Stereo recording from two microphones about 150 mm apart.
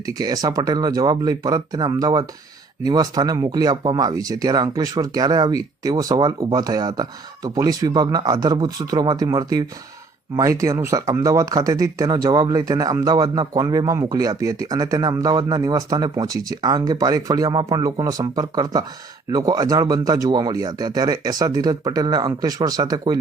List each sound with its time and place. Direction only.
0.0 s speech: 25° right (ahead or behind)